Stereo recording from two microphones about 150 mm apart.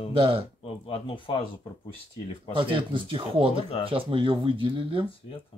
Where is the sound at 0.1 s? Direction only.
40° right (ahead or behind).